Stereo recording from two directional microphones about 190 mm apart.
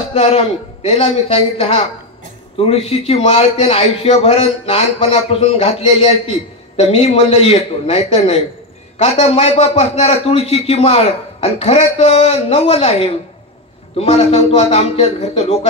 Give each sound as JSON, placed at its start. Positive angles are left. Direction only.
{"t": 0.1, "sound": "a man's voice", "side_deg": 30}